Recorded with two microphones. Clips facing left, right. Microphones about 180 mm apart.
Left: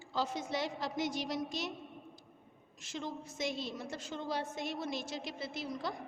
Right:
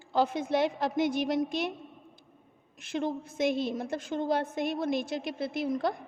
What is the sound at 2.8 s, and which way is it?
A woman's voice, 60° right (ahead or behind).